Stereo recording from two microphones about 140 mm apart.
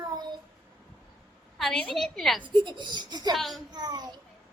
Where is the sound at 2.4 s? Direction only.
35° right (ahead or behind).